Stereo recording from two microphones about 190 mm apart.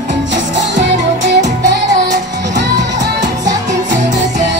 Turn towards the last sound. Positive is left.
turn(degrees=-65)  # may be behind; listen again after turning